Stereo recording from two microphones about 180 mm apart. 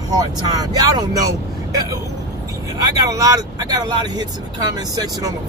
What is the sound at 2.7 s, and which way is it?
Speech, 20° right (ahead or behind).